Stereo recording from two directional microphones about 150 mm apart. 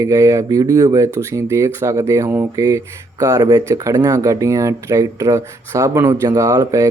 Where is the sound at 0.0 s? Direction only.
20° right (ahead or behind).